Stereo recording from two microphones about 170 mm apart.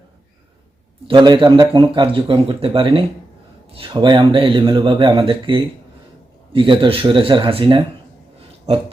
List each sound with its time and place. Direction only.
1.0 s speech: 25° right (ahead or behind)